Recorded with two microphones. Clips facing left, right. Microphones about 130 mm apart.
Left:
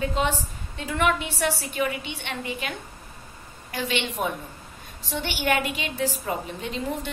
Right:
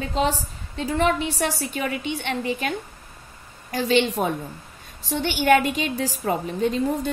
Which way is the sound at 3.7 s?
40° right (ahead or behind).